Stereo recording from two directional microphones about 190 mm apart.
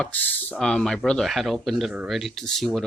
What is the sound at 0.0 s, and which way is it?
Speech, 10° left (ahead or behind).